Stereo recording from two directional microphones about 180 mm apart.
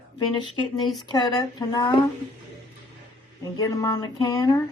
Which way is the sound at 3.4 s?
20° left (ahead or behind).